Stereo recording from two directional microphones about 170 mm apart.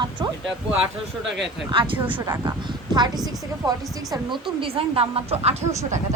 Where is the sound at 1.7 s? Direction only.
30° right (ahead or behind).